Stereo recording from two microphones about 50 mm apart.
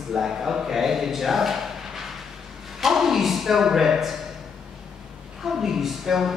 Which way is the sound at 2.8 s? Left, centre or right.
Centre.